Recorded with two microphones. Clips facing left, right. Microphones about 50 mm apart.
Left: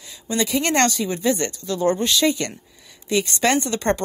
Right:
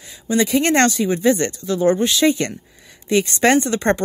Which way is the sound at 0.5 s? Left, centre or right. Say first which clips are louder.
Right 3 dB; right.